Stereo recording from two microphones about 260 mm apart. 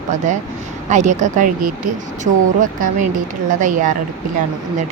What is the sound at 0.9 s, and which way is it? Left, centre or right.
Speech, right.